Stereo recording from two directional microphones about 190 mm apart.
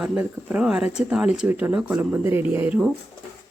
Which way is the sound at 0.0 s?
5° right (ahead or behind).